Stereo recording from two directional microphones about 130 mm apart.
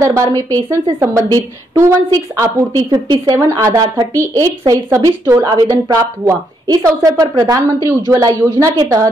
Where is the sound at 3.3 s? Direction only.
25° right (ahead or behind).